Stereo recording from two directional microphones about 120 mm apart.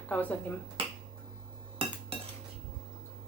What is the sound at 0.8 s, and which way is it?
Finger snapping, 50° right (ahead or behind).